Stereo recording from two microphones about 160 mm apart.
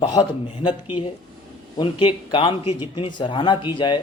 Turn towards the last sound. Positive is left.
turn(degrees=30)  # may be behind; listen again after turning